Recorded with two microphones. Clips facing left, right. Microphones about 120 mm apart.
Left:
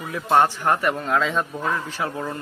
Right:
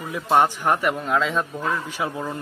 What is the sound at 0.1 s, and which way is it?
Speech, 15° right (ahead or behind).